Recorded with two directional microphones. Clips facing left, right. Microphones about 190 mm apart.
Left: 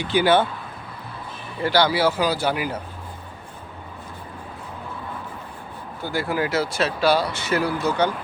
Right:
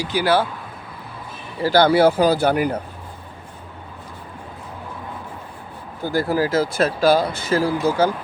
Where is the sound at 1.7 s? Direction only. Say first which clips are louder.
Right 6 dB; 50° right (ahead or behind).